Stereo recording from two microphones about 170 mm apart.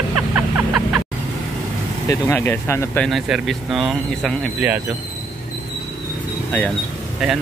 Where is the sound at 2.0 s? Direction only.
15° left (ahead or behind); by 4.8 s 10° right (ahead or behind).